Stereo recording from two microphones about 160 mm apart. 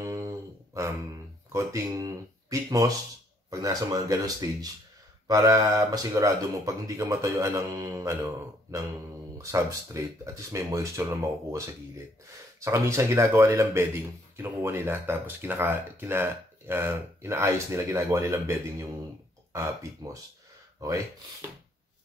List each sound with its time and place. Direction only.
0.0 s a sound: 20° right (ahead or behind)
1.5 s speech: 20° right (ahead or behind)
3.4 s speech: 20° right (ahead or behind)
12.6 s speech: 20° right (ahead or behind)